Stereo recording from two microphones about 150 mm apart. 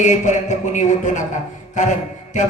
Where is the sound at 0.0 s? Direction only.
55° left (ahead or behind).